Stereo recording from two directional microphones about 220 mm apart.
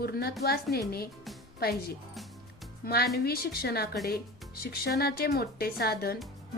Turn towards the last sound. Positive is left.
turn(degrees=45)  # may be behind; listen again after turning